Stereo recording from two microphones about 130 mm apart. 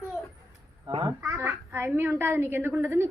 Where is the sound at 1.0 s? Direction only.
20° right (ahead or behind).